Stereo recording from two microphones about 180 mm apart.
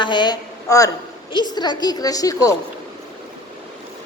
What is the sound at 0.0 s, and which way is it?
A woman's voice, 25° left (ahead or behind).